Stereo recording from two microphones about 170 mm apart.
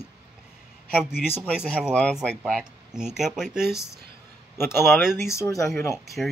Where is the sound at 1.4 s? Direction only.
5° right (ahead or behind).